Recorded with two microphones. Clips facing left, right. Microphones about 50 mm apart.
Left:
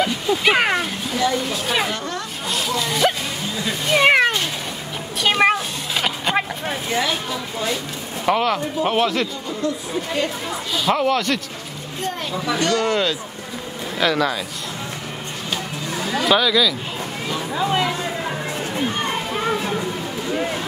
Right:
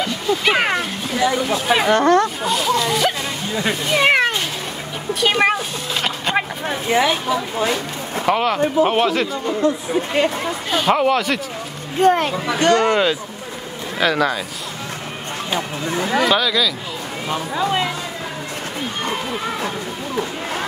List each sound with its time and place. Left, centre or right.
0.0 s a sound: centre
1.2 s speech: centre
1.9 s speech: right
2.4 s speech: centre
6.9 s speech: centre
8.3 s speech: centre
9.5 s speech: right
11.0 s speech: centre
12.0 s speech: right
12.4 s speech: right
13.9 s speech: centre
15.5 s speech: right
16.3 s speech: centre